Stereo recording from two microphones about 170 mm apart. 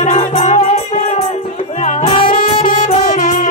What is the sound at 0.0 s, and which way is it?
Music, 45° left (ahead or behind).